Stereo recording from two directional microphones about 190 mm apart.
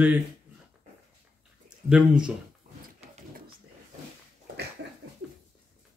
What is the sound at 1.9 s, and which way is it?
Speech, 5° right (ahead or behind).